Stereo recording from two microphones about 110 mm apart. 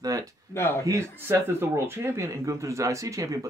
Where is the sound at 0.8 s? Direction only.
30° right (ahead or behind).